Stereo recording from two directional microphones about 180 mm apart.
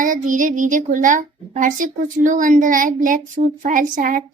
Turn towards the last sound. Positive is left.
turn(degrees=-50)  # may be behind; listen again after turning